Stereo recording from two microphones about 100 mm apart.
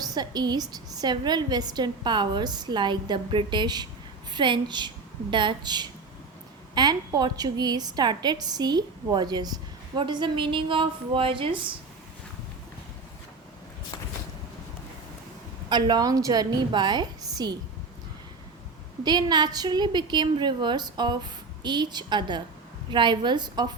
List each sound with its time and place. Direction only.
0.0 s a woman's voice: 40° right (ahead or behind)
15.7 s a woman's voice: 45° right (ahead or behind)
19.0 s a woman's voice: 45° right (ahead or behind)